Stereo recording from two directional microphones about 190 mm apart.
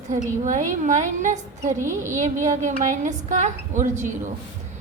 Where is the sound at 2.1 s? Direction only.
40° right (ahead or behind).